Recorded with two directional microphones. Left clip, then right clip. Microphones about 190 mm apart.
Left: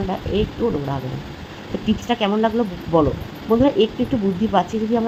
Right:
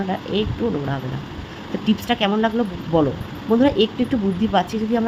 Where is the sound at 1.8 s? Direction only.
5° right (ahead or behind).